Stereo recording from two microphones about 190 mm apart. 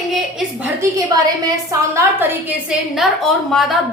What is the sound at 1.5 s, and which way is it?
Speech, 15° right (ahead or behind).